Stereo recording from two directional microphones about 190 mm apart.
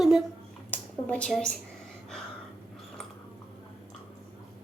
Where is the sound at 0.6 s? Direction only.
10° left (ahead or behind).